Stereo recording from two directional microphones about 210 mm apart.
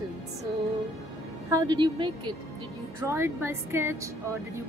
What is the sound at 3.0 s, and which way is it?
A woman's voice, 10° right (ahead or behind).